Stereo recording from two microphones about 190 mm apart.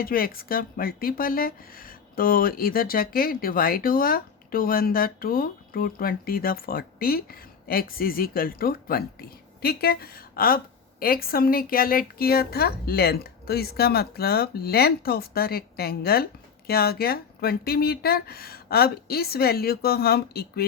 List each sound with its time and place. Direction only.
0.0 s speech: 50° left (ahead or behind)